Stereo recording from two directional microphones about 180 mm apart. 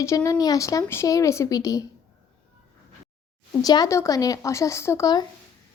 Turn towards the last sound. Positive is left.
turn(degrees=20)  # may be behind; listen again after turning